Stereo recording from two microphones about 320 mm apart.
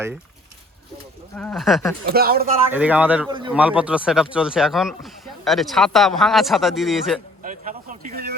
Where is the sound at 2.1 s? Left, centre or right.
Right.